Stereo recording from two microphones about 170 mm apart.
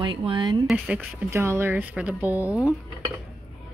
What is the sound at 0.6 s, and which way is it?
Speech, centre (ahead or behind).